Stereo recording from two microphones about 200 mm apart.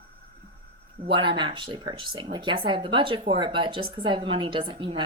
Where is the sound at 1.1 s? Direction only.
25° right (ahead or behind).